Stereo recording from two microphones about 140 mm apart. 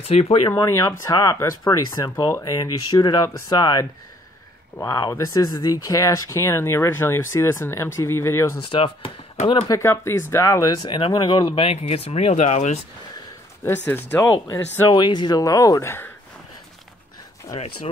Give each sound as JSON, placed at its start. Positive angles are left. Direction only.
{"t": 0.1, "sound": "speech", "side_deg": 45}
{"t": 0.5, "sound": "speech", "side_deg": 20}
{"t": 8.6, "sound": "speech", "side_deg": 40}
{"t": 9.7, "sound": "speech", "side_deg": 20}
{"t": 13.8, "sound": "speech", "side_deg": 15}
{"t": 14.9, "sound": "speech", "side_deg": 35}